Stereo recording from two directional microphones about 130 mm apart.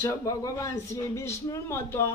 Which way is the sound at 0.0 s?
25° left (ahead or behind).